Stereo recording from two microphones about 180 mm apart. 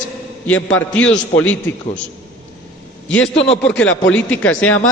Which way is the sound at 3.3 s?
85° left.